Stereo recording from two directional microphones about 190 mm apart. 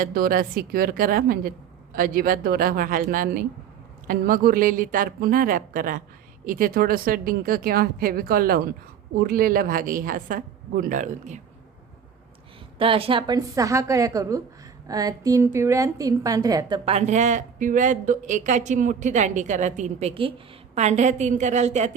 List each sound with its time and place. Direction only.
0.0 s speech: 50° right (ahead or behind)
12.8 s a woman's voice: 30° right (ahead or behind)